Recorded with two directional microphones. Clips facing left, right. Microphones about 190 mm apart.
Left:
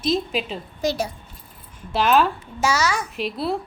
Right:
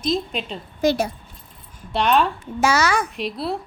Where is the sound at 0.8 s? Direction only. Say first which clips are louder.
Right 4 dB; 55° right (ahead or behind).